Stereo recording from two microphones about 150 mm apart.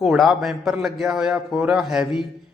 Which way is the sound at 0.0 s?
Centre (ahead or behind).